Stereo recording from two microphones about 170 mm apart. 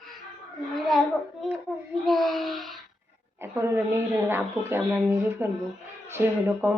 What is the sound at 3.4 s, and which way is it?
Speech, 15° right (ahead or behind).